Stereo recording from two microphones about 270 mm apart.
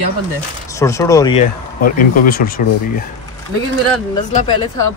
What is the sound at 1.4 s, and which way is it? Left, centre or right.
Speech, left.